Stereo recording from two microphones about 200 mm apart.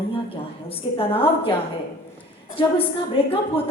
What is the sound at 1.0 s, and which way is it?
Speech, 25° left (ahead or behind).